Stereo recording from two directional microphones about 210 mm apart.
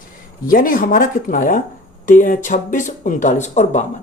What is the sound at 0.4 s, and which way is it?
A man's voice, 40° left (ahead or behind).